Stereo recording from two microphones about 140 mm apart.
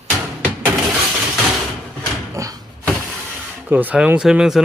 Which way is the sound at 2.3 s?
25° right (ahead or behind).